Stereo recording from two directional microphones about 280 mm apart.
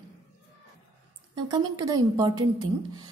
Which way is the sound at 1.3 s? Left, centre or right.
Centre.